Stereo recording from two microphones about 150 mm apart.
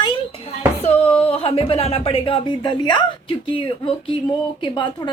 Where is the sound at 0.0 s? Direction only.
35° left (ahead or behind).